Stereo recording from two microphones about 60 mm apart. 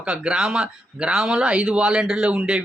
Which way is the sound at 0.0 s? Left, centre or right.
Centre.